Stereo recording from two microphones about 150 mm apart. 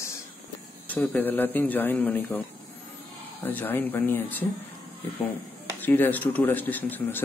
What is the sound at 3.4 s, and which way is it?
Speech, 10° left (ahead or behind).